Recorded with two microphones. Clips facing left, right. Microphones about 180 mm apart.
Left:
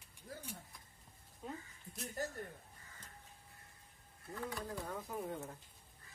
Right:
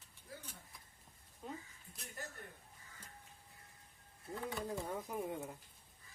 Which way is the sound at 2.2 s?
40° left (ahead or behind).